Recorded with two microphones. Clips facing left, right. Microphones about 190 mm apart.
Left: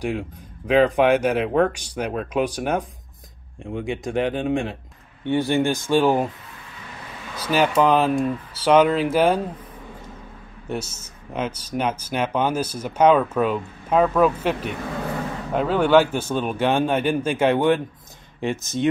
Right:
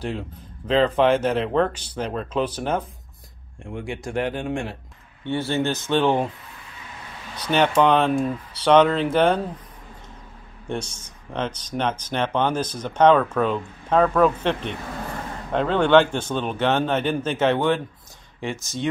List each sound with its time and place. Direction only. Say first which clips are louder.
0.7 s speech: left 2 dB; 15° left (ahead or behind)
7.4 s speech: even; 5° left (ahead or behind)
10.7 s speech: even; 5° left (ahead or behind)